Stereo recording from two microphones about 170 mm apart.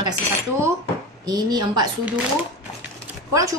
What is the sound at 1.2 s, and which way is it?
Speech, 25° right (ahead or behind).